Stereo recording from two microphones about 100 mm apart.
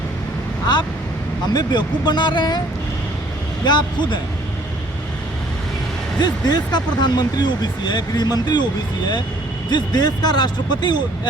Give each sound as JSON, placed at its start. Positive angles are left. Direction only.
{"t": 1.5, "sound": "speech", "side_deg": 45}
{"t": 3.7, "sound": "speech", "side_deg": 50}
{"t": 6.1, "sound": "speech", "side_deg": 45}
{"t": 9.6, "sound": "speech", "side_deg": 45}